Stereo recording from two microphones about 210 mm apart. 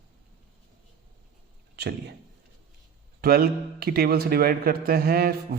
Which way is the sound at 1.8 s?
50° right (ahead or behind).